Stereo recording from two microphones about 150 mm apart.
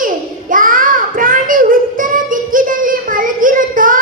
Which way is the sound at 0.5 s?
65° right (ahead or behind).